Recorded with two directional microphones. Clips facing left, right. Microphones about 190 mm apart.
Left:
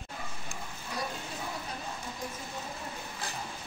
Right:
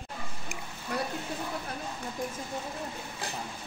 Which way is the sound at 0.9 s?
60° right (ahead or behind).